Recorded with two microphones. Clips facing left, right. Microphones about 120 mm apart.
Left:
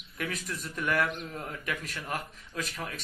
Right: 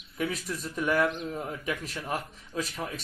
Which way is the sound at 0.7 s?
10° right (ahead or behind).